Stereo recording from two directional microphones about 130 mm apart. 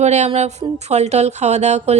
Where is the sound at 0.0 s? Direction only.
60° right (ahead or behind).